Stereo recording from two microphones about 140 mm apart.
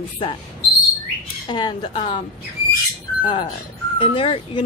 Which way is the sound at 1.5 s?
30° left (ahead or behind).